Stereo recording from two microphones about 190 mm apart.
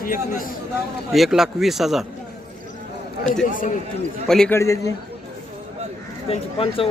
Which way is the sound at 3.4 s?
45° left (ahead or behind).